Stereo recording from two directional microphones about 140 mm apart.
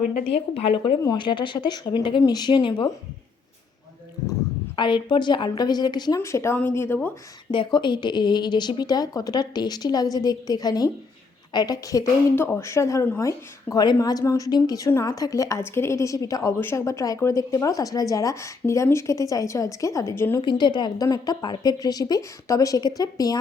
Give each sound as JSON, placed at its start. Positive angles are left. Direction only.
{"t": 0.3, "sound": "speech", "side_deg": 45}
{"t": 4.8, "sound": "speech", "side_deg": 35}
{"t": 6.1, "sound": "speech", "side_deg": 20}
{"t": 7.5, "sound": "a woman's voice", "side_deg": 35}
{"t": 20.4, "sound": "a woman's voice", "side_deg": 35}